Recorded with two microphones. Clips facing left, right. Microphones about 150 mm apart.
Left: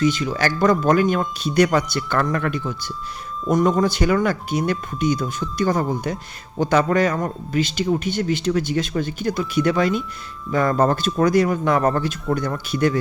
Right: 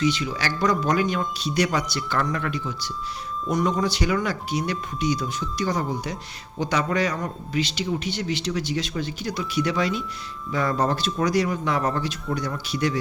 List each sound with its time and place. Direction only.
0.0 s a man's voice: 45° left (ahead or behind)